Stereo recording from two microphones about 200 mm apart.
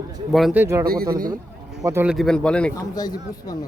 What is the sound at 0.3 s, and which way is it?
Speech, 5° right (ahead or behind).